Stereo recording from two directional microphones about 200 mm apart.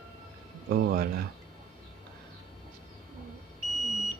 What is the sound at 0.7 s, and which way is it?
Speech, 50° right (ahead or behind).